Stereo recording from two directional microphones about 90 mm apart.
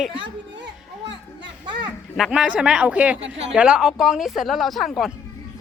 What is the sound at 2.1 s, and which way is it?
Speech, 5° right (ahead or behind).